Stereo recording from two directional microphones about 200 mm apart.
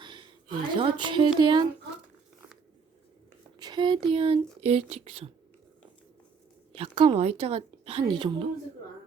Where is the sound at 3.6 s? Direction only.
20° right (ahead or behind).